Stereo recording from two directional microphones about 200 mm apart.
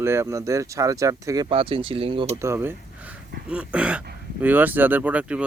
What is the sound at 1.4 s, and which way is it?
Speech, 30° right (ahead or behind).